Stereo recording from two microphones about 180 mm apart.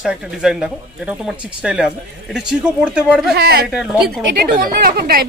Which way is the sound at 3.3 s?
60° right (ahead or behind).